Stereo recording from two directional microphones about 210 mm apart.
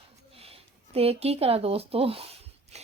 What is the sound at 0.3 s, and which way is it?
A woman's voice, 25° right (ahead or behind).